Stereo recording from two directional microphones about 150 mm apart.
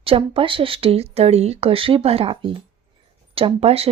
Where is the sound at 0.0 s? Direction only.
35° right (ahead or behind).